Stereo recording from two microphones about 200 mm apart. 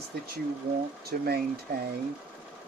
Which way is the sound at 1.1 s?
50° right (ahead or behind).